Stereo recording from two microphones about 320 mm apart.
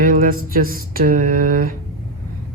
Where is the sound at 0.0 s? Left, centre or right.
Right.